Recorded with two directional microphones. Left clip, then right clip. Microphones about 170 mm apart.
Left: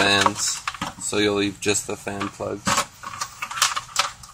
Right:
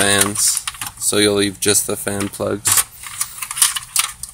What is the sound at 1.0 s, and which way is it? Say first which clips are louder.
Speech: right 6 dB; 40° right (ahead or behind).